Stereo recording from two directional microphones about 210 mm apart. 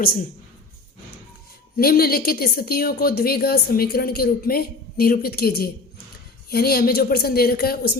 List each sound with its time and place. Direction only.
0.0 s a woman's voice: 45° left (ahead or behind)
1.7 s a woman's voice: 45° left (ahead or behind)